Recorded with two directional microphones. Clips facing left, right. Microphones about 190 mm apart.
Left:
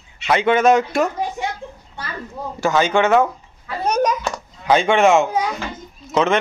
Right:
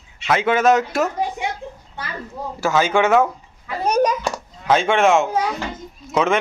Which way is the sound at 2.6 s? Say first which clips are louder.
Left 1 dB; 5° right (ahead or behind).